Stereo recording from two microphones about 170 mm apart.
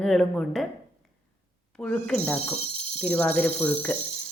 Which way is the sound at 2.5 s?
40° left (ahead or behind).